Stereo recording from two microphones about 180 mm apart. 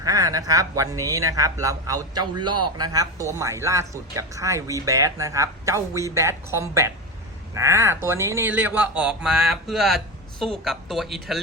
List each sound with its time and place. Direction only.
0.0 s a man's voice: 20° right (ahead or behind); by 11.3 s centre (ahead or behind)